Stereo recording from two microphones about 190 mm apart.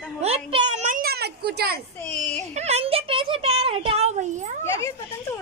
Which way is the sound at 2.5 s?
35° right (ahead or behind).